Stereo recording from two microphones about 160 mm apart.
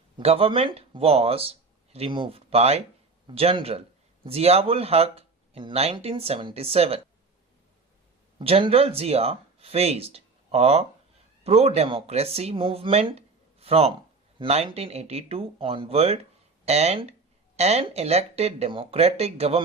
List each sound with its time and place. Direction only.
0.2 s speech: 40° right (ahead or behind)
8.4 s speech: 35° right (ahead or behind)